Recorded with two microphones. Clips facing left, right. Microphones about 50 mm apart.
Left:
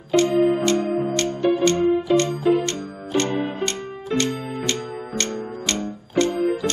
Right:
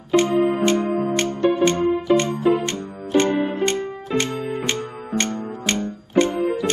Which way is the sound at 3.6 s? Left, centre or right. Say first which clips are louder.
Right 4 dB; right.